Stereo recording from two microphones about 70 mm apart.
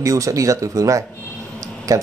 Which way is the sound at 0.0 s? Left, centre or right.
Right.